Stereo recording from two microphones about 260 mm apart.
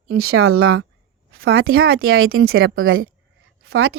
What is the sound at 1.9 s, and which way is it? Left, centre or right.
A woman's voice, right.